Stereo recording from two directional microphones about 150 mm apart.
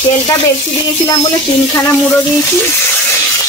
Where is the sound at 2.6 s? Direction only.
15° left (ahead or behind).